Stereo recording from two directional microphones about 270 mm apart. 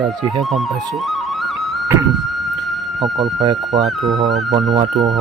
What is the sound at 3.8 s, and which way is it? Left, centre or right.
Speech, centre.